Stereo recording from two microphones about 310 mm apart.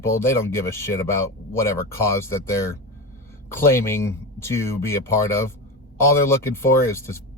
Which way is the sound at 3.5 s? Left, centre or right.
Centre.